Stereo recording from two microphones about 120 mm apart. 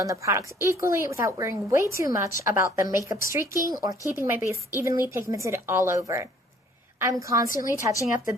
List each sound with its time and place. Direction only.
0.0 s a woman's voice: 25° right (ahead or behind)